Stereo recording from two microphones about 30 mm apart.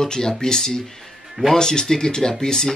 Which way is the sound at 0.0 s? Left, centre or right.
Centre.